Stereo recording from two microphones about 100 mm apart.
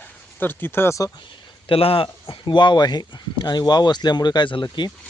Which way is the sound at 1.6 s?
65° left (ahead or behind).